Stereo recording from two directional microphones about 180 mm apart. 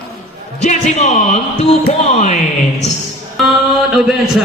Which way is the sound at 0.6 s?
40° left (ahead or behind).